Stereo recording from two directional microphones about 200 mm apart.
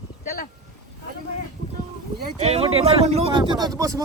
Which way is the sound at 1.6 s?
55° left (ahead or behind).